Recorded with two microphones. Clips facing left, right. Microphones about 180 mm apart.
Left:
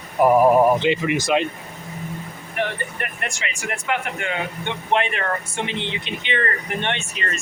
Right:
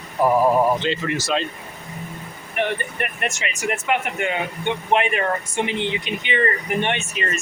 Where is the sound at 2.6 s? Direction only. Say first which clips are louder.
Right 2 dB; 20° right (ahead or behind).